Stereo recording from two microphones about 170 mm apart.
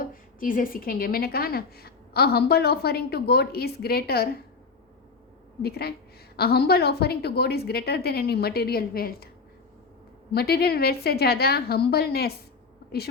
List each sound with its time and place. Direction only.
0.0 s a woman's voice: 55° left (ahead or behind)
5.6 s a woman's voice: 65° left (ahead or behind)
10.3 s a woman's voice: 65° left (ahead or behind)